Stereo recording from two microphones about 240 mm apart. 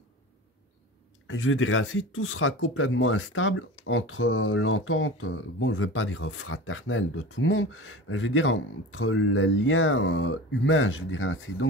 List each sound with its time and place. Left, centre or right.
1.2 s speech: left